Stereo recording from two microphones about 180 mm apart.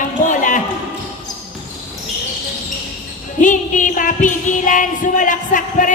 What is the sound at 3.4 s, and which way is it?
Music, 45° left (ahead or behind).